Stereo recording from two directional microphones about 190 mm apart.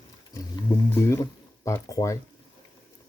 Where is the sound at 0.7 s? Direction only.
15° left (ahead or behind).